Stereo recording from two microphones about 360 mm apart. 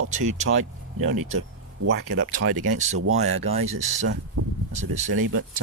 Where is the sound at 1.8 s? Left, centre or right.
Right.